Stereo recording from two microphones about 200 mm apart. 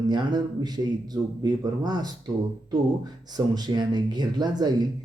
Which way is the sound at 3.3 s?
20° right (ahead or behind).